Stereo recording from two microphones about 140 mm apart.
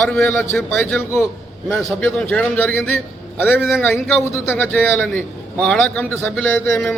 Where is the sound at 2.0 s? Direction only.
10° left (ahead or behind).